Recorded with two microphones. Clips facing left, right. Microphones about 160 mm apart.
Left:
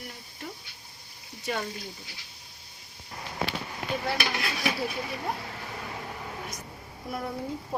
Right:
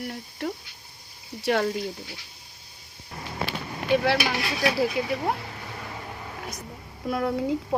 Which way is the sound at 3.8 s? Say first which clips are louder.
Right 9 dB; 80° right.